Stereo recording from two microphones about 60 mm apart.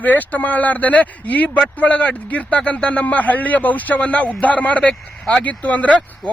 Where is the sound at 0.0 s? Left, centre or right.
Left.